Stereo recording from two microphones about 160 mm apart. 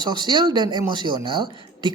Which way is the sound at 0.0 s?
25° right (ahead or behind).